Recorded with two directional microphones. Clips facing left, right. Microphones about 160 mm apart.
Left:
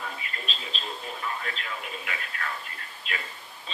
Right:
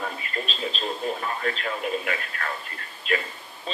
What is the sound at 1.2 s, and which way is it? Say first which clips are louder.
A man's voice: right 6 dB; 45° right (ahead or behind).